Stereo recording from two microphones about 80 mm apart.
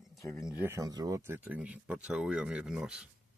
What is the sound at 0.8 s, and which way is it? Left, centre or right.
Speech, right.